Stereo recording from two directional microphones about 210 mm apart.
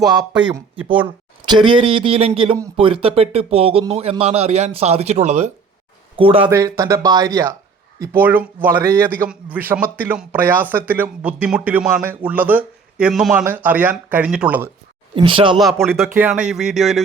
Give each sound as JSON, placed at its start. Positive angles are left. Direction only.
{"t": 1.4, "sound": "speech", "side_deg": -20}
{"t": 15.1, "sound": "speech", "side_deg": -25}
{"t": 15.5, "sound": "speech", "side_deg": 0}